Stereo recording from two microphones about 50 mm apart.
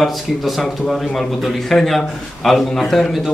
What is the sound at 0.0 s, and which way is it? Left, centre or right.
A man's voice, centre.